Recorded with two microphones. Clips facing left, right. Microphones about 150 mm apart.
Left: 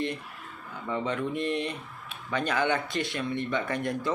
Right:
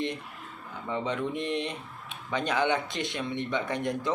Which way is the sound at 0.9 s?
20° right (ahead or behind).